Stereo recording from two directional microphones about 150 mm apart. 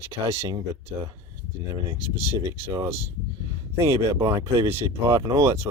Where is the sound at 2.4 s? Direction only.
20° right (ahead or behind).